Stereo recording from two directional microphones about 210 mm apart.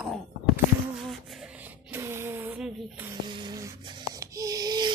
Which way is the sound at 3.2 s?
20° right (ahead or behind).